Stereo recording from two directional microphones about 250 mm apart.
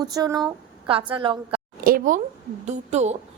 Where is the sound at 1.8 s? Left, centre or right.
Right.